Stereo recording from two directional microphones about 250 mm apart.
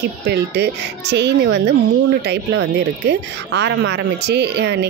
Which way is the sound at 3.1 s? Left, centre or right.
Right.